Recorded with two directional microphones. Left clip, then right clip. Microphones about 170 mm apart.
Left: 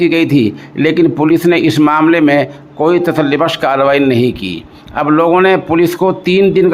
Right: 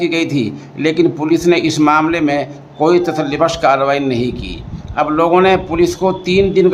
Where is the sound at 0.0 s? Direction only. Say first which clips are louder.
Left 5 dB; 25° left (ahead or behind).